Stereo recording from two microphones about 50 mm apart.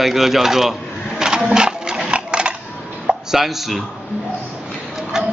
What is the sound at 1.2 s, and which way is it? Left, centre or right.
Sewing machine, centre.